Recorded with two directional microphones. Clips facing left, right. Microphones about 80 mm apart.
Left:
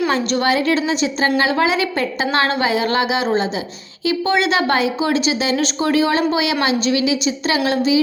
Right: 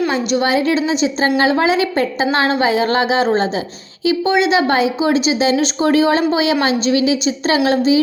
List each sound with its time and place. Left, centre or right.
0.1 s a woman's voice: centre; by 3.5 s right
4.0 s a woman's voice: right